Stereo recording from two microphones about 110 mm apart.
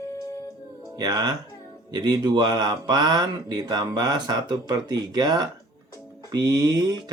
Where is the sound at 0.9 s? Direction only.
40° right (ahead or behind).